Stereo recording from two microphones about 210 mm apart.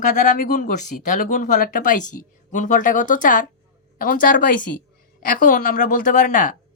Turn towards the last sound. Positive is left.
turn(degrees=35)  # may be behind; listen again after turning